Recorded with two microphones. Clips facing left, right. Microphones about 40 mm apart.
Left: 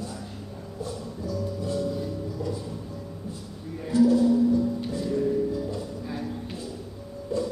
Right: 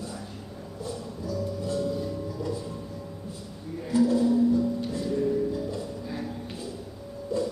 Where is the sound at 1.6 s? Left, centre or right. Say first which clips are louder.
Left 1 dB; centre.